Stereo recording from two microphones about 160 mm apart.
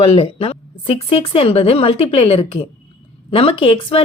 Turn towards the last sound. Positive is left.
turn(degrees=35)  # may be behind; listen again after turning